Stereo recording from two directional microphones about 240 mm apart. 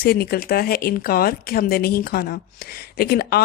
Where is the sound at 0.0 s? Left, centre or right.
Left.